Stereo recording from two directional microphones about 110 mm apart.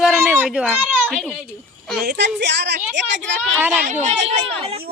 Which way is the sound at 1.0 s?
5° left (ahead or behind).